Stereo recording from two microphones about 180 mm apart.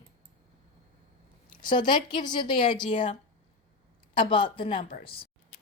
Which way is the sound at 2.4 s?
25° left (ahead or behind).